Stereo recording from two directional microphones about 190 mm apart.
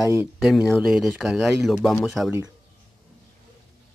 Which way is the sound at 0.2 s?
Centre (ahead or behind).